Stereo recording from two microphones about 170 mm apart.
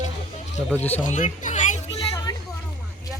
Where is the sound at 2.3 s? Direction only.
25° left (ahead or behind).